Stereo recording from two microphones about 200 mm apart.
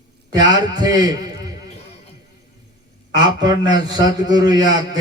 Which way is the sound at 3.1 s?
20° right (ahead or behind).